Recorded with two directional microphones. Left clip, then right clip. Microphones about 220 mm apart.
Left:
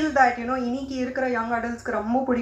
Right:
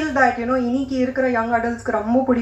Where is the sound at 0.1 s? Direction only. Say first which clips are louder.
Right 4 dB; 50° left (ahead or behind).